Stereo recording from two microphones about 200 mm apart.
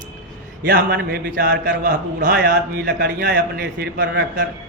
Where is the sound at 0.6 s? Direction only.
50° right (ahead or behind).